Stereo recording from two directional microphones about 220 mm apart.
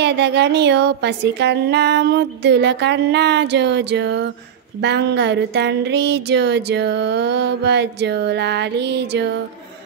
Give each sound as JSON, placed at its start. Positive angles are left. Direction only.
{"t": 0.0, "sound": "speech", "side_deg": -50}